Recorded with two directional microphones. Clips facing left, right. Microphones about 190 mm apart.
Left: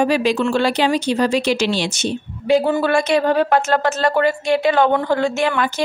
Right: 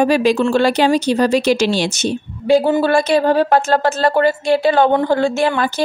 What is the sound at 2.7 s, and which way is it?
A woman's voice, 30° right (ahead or behind).